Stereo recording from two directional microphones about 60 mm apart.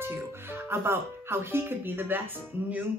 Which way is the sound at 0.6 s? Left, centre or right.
Right.